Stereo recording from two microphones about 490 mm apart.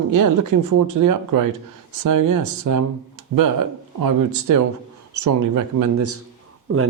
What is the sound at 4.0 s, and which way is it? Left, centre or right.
Speech, right.